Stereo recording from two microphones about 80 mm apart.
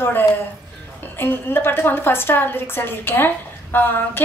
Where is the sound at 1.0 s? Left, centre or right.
Left.